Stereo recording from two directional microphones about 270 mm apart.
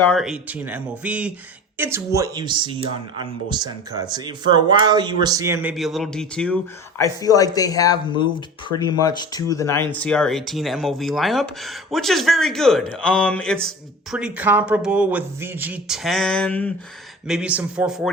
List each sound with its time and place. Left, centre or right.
0.1 s speech: centre
5.7 s speech: centre